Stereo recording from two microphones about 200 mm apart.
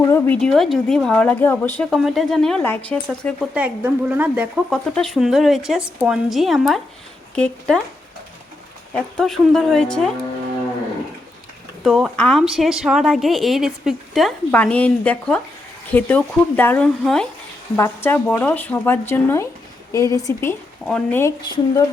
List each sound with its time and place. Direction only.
0.0 s a woman's voice: 10° left (ahead or behind)
1.8 s a woman's voice: centre (ahead or behind)
3.5 s a woman's voice: 10° right (ahead or behind)
9.0 s a woman's voice: centre (ahead or behind)
11.8 s a woman's voice: centre (ahead or behind); by 21.8 s 15° left (ahead or behind)